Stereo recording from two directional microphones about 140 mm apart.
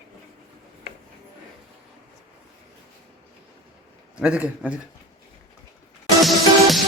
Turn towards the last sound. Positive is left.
turn(degrees=0)  # may be behind; listen again after turning